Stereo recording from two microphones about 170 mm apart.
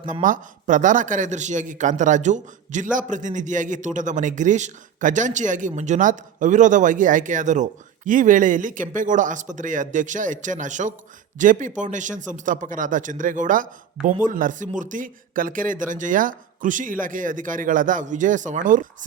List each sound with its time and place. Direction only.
0.0 s speech: 50° right (ahead or behind)